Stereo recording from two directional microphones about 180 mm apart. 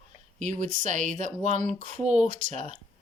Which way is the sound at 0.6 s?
45° right (ahead or behind).